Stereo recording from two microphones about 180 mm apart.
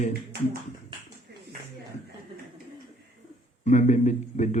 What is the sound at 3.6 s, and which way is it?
Speech, 40° left (ahead or behind).